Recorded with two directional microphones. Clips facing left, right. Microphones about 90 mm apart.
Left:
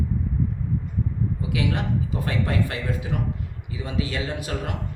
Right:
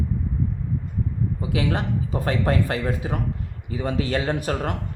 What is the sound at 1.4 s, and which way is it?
A man's voice, 35° right (ahead or behind).